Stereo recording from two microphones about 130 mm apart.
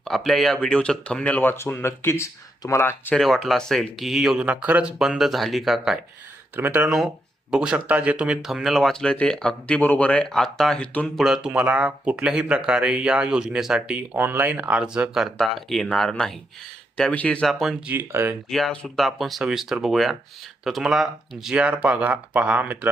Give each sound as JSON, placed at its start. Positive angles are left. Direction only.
{"t": 0.0, "sound": "speech", "side_deg": 0}
{"t": 3.2, "sound": "speech", "side_deg": 0}
{"t": 6.6, "sound": "speech", "side_deg": -15}
{"t": 6.8, "sound": "speech", "side_deg": -5}
{"t": 11.3, "sound": "speech", "side_deg": -10}
{"t": 17.8, "sound": "speech", "side_deg": -15}
{"t": 18.5, "sound": "speech", "side_deg": 5}